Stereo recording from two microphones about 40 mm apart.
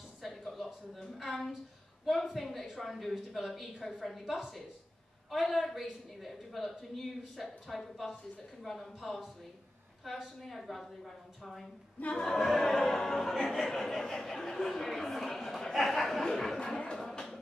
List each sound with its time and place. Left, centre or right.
0.2 s a sound: centre
0.9 s a woman's voice: centre
12.2 s opera: centre
15.7 s a woman's voice: centre
16.5 s speech: left